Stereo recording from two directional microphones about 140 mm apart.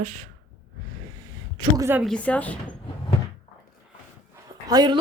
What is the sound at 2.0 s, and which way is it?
Speech, 5° left (ahead or behind).